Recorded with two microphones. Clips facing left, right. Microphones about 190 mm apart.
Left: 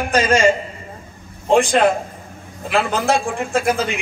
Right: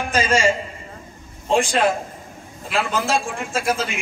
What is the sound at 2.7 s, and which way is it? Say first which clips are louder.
A man's voice: left 4 dB; 60° left (ahead or behind).